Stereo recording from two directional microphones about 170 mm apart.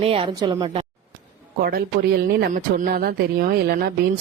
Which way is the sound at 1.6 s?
65° right (ahead or behind).